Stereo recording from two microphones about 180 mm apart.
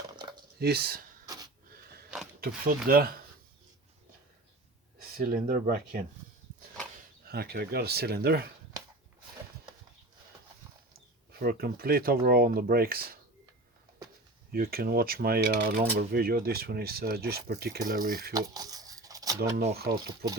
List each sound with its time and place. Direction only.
0.6 s speech: 60° right (ahead or behind)
2.4 s speech: 55° right (ahead or behind)
5.1 s speech: 50° right (ahead or behind)
7.3 s speech: 60° right (ahead or behind)
11.3 s speech: 55° right (ahead or behind)
14.5 s speech: 60° right (ahead or behind)
18.3 s a sound: 20° right (ahead or behind)
19.7 s speech: 60° right (ahead or behind)